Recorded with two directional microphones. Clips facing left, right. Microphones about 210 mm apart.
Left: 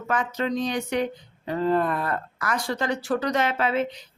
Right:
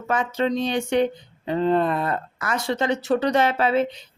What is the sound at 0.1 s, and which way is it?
Speech, 25° right (ahead or behind).